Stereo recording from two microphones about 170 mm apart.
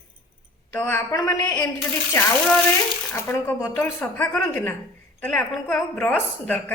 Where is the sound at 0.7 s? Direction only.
10° left (ahead or behind).